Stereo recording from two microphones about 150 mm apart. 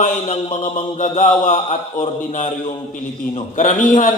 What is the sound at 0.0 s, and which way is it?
A man's voice, 55° left (ahead or behind).